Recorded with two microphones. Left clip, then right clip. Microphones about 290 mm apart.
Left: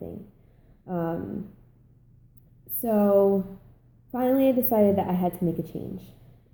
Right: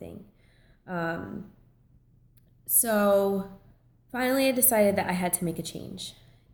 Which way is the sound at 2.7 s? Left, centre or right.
Right.